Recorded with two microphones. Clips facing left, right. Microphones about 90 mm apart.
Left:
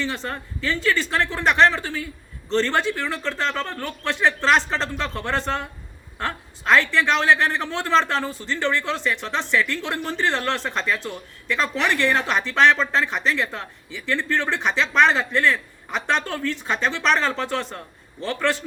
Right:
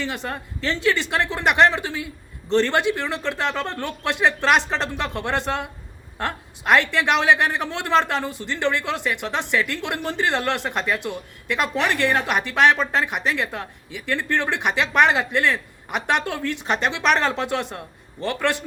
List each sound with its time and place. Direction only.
0.0 s speech: 15° right (ahead or behind)